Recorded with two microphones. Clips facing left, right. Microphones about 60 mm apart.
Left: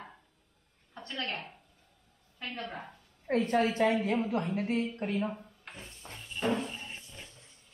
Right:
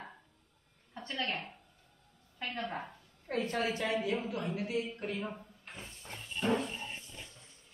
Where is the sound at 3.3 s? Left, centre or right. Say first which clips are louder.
Left 6 dB; left.